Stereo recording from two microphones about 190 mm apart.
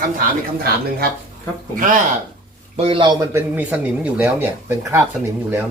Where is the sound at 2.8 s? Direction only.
25° right (ahead or behind).